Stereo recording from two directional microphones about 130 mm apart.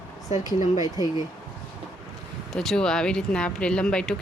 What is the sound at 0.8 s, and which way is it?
Speech, 30° left (ahead or behind).